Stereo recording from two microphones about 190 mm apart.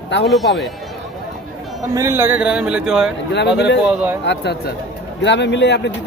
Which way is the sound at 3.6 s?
65° left (ahead or behind).